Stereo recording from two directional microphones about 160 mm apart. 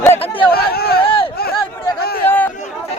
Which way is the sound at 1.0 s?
35° left (ahead or behind).